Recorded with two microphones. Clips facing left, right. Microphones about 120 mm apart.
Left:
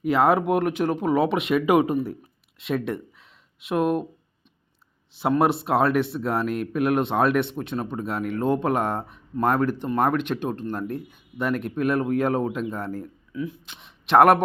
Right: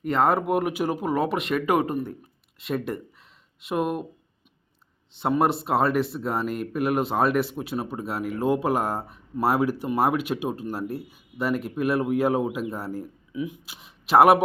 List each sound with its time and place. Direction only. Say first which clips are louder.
0.0 s speech: left 2 dB; centre (ahead or behind)
5.1 s speech: left 2 dB; centre (ahead or behind); by 13.7 s 15° right (ahead or behind)
13.7 s speech: left 1 dB; 5° right (ahead or behind)